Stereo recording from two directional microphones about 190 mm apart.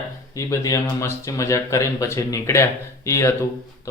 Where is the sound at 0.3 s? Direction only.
15° left (ahead or behind).